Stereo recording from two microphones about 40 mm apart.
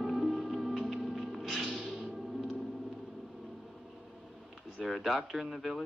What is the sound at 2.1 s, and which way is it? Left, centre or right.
Music, centre.